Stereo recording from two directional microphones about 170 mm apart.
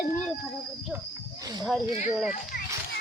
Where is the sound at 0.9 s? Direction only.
20° right (ahead or behind).